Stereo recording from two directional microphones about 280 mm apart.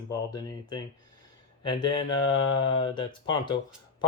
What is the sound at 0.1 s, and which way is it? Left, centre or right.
Speech, centre.